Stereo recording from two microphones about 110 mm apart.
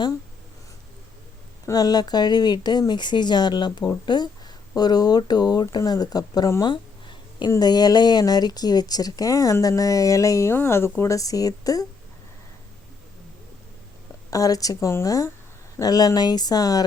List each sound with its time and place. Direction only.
1.6 s speech: 35° left (ahead or behind)
7.1 s a sound: 45° left (ahead or behind)
7.5 s speech: 35° left (ahead or behind)
14.3 s speech: 30° left (ahead or behind)